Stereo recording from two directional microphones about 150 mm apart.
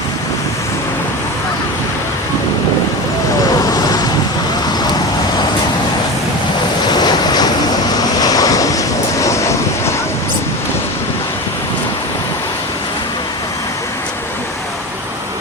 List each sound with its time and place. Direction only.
3.6 s vehicle: 25° left (ahead or behind)
6.8 s waves: 30° left (ahead or behind)
8.2 s vehicle: 25° left (ahead or behind)